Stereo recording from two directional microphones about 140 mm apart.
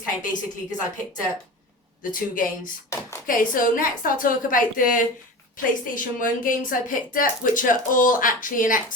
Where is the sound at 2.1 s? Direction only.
75° left (ahead or behind).